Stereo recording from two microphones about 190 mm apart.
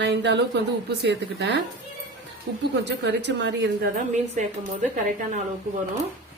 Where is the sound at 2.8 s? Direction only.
65° right (ahead or behind).